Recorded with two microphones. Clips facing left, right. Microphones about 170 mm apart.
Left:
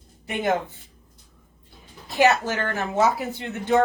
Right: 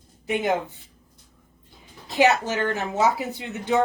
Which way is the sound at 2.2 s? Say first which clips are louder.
Even; 20° right (ahead or behind).